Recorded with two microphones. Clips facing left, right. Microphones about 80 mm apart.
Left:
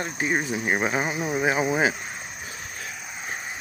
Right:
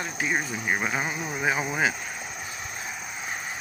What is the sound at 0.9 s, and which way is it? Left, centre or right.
Speech, centre.